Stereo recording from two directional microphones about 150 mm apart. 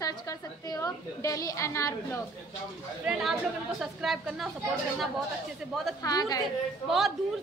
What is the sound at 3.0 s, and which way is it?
A woman's voice, 5° right (ahead or behind).